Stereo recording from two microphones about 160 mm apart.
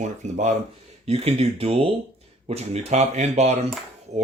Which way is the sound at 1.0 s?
40° right (ahead or behind).